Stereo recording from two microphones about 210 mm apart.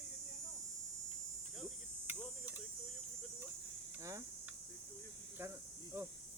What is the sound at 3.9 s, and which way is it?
Cricket, 15° right (ahead or behind).